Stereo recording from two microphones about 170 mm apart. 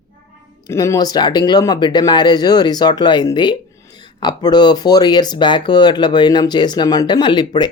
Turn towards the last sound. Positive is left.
turn(degrees=25)  # may be behind; listen again after turning